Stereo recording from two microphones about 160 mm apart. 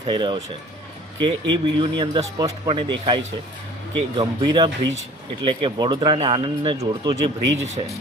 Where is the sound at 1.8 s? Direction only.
30° right (ahead or behind).